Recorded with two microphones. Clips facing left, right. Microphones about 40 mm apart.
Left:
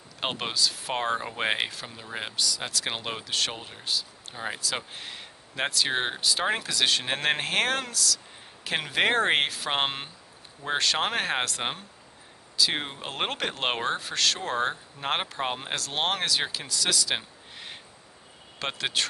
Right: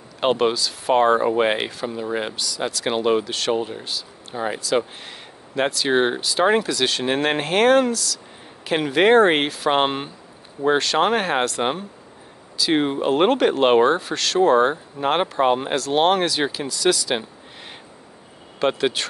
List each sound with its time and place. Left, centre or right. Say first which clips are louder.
0.2 s speech: right 9 dB; centre